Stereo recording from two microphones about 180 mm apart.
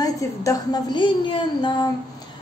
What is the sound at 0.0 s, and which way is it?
A woman's voice, 20° left (ahead or behind).